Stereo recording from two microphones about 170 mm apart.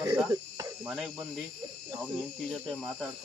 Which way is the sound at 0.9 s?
Centre (ahead or behind).